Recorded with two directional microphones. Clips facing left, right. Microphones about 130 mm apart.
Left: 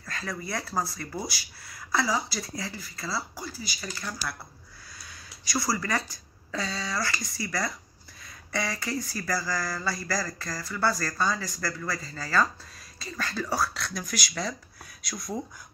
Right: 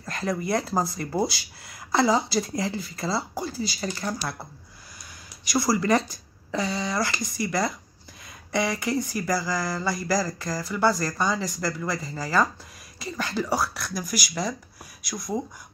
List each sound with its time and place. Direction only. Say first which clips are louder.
0.0 s speech: right 7 dB; 20° right (ahead or behind)
5.5 s speech: right 7 dB; 20° right (ahead or behind)